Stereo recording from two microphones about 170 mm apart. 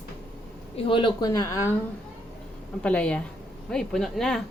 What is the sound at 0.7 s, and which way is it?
Speech, 30° left (ahead or behind).